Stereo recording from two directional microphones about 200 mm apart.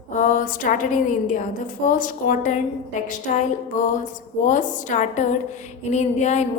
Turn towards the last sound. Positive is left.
turn(degrees=35)  # may be behind; listen again after turning